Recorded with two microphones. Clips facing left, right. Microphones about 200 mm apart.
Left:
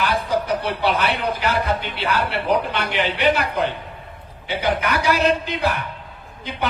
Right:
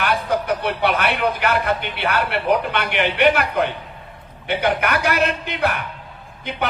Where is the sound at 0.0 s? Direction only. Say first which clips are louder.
Even; 60° right (ahead or behind).